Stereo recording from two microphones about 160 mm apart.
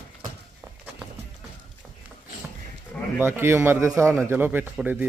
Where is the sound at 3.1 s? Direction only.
15° right (ahead or behind).